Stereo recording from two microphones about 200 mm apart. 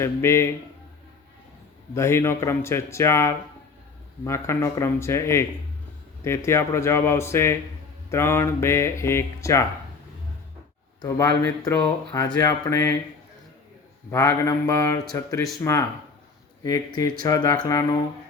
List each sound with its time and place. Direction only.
0.0 s speech: 15° left (ahead or behind)
2.0 s speech: 15° left (ahead or behind)
11.0 s speech: 20° left (ahead or behind)
14.1 s speech: 15° left (ahead or behind)
16.6 s speech: 20° left (ahead or behind)